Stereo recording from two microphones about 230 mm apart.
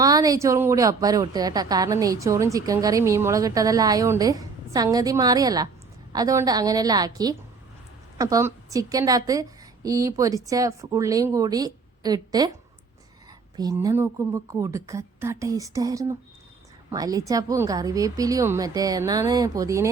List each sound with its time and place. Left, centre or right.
0.0 s speech: centre
13.6 s speech: centre